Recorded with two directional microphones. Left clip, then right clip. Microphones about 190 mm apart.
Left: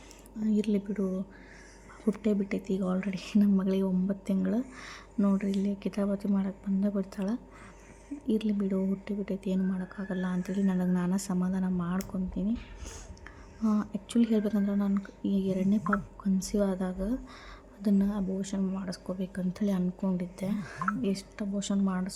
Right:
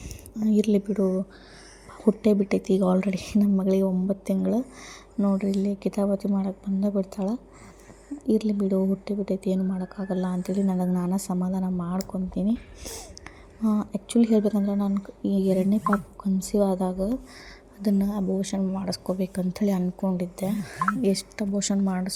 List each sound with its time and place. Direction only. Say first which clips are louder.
0.3 s a woman's voice: right 7 dB; 20° right (ahead or behind)
12.3 s a woman's voice: right 6 dB; 20° right (ahead or behind)